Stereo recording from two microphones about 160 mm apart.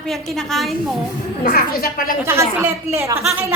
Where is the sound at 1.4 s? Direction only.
65° left (ahead or behind).